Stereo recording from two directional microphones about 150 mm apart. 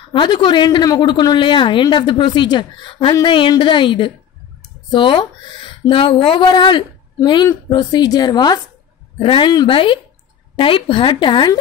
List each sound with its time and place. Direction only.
0.1 s a woman's voice: 30° left (ahead or behind)